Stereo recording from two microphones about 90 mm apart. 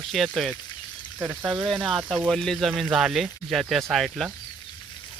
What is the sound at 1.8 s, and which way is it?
Speech, 10° right (ahead or behind).